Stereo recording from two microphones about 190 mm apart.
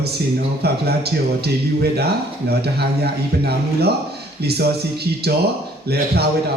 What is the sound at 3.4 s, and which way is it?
Speech, 55° right (ahead or behind).